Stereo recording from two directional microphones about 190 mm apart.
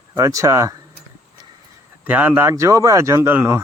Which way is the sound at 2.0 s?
10° right (ahead or behind).